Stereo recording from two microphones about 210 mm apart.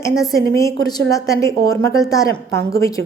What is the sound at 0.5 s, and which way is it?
A woman's voice, 15° left (ahead or behind).